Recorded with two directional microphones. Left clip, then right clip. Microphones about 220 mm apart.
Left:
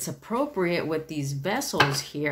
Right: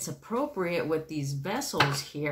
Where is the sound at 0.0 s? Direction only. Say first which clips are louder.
Left 3 dB; 35° left (ahead or behind).